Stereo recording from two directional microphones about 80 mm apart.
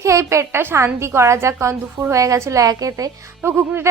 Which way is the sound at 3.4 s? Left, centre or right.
Right.